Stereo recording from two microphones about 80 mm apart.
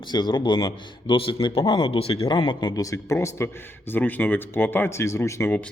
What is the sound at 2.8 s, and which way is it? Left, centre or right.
Speech, left.